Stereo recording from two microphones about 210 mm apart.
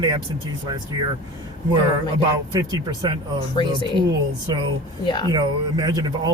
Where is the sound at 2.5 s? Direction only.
20° right (ahead or behind).